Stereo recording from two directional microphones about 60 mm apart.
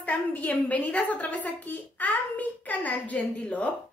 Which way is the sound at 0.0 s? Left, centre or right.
Left.